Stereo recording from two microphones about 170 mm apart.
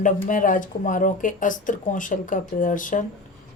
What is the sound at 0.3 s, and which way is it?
Speech, 50° left (ahead or behind).